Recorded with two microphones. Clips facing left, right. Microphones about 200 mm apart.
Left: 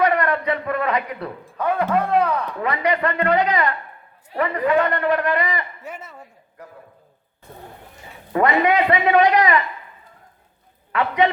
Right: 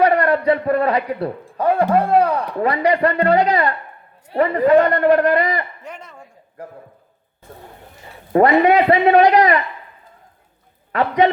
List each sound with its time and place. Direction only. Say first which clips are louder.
0.0 s a man's voice: right 4 dB; 35° right (ahead or behind)
5.8 s a sound: even; 5° left (ahead or behind)
8.3 s a man's voice: right 5 dB; 35° right (ahead or behind)
10.9 s a man's voice: right 3 dB; 35° right (ahead or behind)